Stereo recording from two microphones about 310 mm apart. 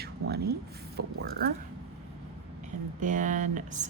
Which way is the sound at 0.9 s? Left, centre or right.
Right.